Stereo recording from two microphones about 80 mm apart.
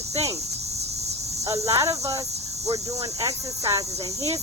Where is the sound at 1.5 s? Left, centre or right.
Right.